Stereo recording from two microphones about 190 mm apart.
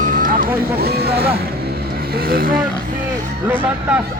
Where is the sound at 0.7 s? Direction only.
55° right (ahead or behind).